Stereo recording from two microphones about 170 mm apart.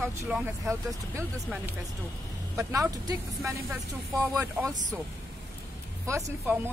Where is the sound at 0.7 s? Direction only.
15° right (ahead or behind).